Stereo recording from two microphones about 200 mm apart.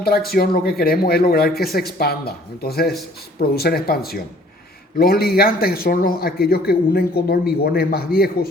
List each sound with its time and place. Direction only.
0.0 s a man's voice: 50° left (ahead or behind)